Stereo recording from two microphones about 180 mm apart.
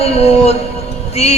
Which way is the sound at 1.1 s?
35° left (ahead or behind).